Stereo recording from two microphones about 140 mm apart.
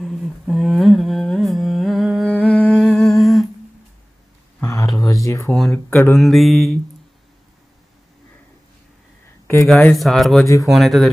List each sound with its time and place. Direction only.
0.0 s humming: centre (ahead or behind)
4.6 s a sound: 20° left (ahead or behind)
5.5 s speech: 5° left (ahead or behind)
5.9 s speech: 15° left (ahead or behind)
6.1 s speech: centre (ahead or behind)
9.9 s speech: centre (ahead or behind)
10.4 s speech: 20° left (ahead or behind)
10.7 s speech: centre (ahead or behind)